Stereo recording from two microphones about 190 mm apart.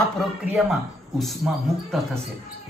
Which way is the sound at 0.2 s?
Centre (ahead or behind).